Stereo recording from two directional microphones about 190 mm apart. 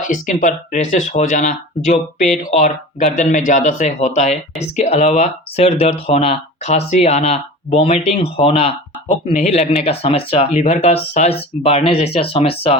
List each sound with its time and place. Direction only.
0.0 s speech: 45° left (ahead or behind)